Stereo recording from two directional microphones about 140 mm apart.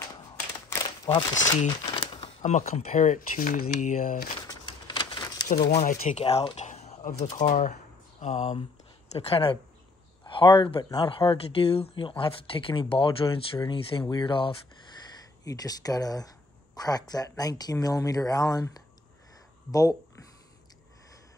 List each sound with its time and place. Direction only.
0.7 s crumpling: 25° left (ahead or behind)
2.4 s speech: 55° left (ahead or behind); by 4.3 s 70° left (ahead or behind)
4.4 s a sound: 30° left (ahead or behind)
5.5 s speech: 55° left (ahead or behind)
7.3 s speech: 60° left (ahead or behind); by 14.6 s 35° left (ahead or behind)
15.1 s speech: 25° left (ahead or behind)